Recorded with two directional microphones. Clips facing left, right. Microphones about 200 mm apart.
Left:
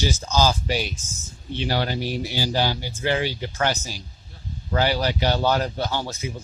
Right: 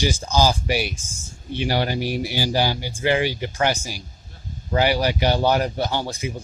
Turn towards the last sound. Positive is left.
turn(degrees=-15)  # may be behind; listen again after turning